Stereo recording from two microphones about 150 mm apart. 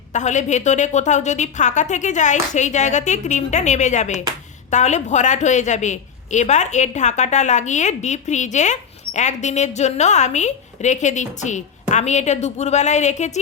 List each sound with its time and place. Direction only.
0.1 s a woman's voice: 55° left (ahead or behind)